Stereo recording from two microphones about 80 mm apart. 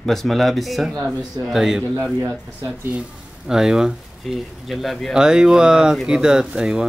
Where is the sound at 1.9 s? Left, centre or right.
Right.